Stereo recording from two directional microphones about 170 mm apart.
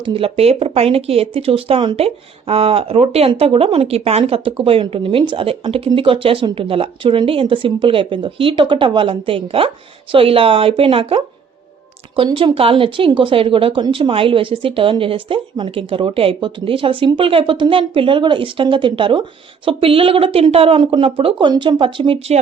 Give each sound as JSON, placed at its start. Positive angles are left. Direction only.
{"t": 0.0, "sound": "speech", "side_deg": -35}